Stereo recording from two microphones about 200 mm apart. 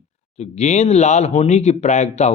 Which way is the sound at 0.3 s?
35° left (ahead or behind).